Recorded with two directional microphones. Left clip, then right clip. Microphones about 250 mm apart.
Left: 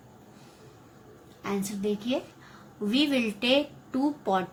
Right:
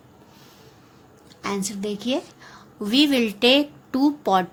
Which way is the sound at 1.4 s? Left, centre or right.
Right.